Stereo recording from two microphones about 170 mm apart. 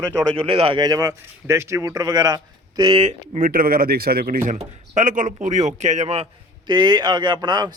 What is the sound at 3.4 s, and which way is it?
Speech, 50° right (ahead or behind).